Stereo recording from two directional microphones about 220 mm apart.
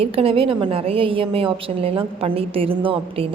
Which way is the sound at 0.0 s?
25° right (ahead or behind).